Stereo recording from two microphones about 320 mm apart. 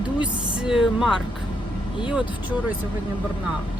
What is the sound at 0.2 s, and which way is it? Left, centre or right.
A woman's voice, centre.